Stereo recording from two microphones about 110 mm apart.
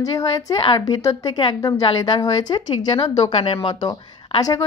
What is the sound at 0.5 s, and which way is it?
Speech, 45° left (ahead or behind).